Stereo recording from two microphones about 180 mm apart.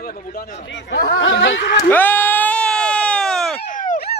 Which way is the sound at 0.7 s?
80° left.